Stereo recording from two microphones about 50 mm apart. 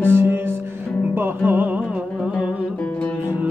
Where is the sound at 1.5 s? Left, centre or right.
Right.